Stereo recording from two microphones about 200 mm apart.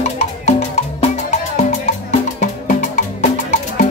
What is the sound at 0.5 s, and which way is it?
Music, 35° left (ahead or behind).